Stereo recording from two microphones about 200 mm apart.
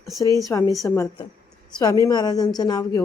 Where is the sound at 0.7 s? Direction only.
15° left (ahead or behind).